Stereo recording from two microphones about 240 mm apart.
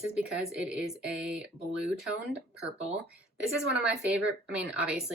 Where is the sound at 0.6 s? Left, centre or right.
Centre.